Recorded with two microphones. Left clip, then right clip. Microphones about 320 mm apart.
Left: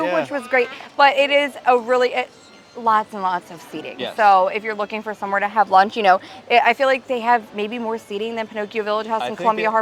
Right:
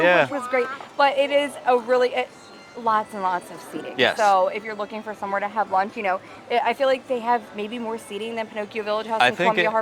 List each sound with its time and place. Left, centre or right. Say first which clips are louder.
0.0 s speech: right 3 dB; right
0.3 s a woman's voice: left 4 dB; left
5.8 s a woman's voice: left 9 dB; left
9.1 s speech: right 4 dB; right